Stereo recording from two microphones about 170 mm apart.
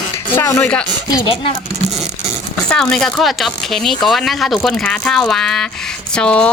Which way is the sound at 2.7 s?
5° left (ahead or behind).